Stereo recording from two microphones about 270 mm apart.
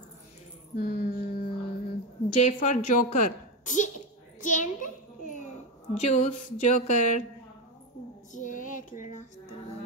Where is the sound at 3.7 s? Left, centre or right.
Left.